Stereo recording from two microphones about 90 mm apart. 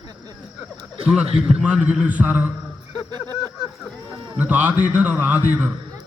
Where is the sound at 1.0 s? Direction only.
10° right (ahead or behind).